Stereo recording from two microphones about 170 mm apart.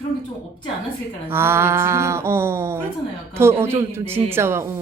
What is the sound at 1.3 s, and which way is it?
Speech, 15° right (ahead or behind).